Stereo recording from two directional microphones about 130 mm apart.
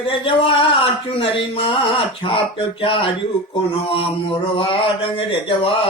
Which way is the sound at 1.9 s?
40° left (ahead or behind).